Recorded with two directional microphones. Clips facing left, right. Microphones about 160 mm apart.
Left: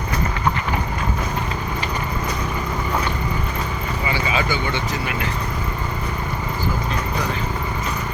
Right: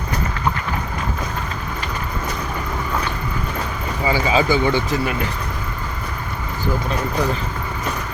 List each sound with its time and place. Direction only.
4.1 s speech: 35° right (ahead or behind)